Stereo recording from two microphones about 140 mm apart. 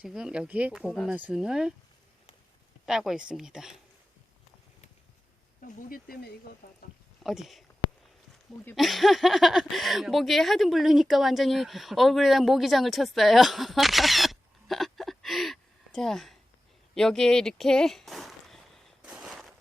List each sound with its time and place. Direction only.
0.0 s speech: 5° right (ahead or behind)
2.8 s speech: 5° right (ahead or behind)
5.6 s speech: 90° left
7.2 s speech: centre (ahead or behind)
8.7 s speech: centre (ahead or behind)
16.9 s a sound: 5° left (ahead or behind)